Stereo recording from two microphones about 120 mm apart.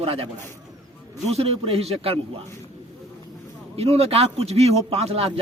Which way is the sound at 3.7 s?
55° right (ahead or behind).